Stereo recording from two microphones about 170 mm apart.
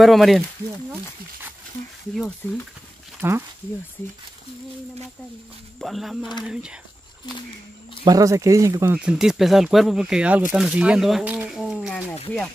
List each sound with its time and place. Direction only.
0.0 s speech: centre (ahead or behind)
2.4 s speech: 10° left (ahead or behind)
3.2 s speech: 15° right (ahead or behind)
5.8 s speech: centre (ahead or behind)
8.0 s speech: 20° right (ahead or behind)
9.0 s speech: 5° right (ahead or behind)